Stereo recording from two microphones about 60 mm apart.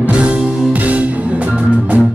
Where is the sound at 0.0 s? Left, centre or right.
Centre.